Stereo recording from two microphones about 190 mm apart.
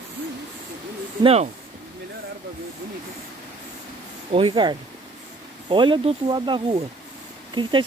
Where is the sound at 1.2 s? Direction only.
30° right (ahead or behind).